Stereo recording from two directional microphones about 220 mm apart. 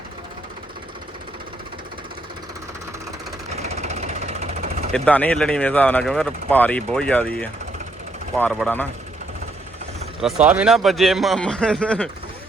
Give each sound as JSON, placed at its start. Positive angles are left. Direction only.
{"t": 3.6, "sound": "jackhammer", "side_deg": -30}
{"t": 4.9, "sound": "speech", "side_deg": 5}
{"t": 10.4, "sound": "speech", "side_deg": -5}